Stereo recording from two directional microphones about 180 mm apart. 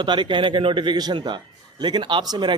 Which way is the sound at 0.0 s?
25° right (ahead or behind).